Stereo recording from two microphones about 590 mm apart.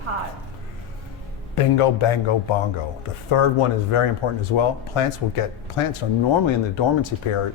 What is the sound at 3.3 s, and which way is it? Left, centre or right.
Speech, left.